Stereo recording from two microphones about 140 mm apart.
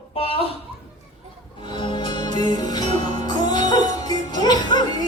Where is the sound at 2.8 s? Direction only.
55° right (ahead or behind).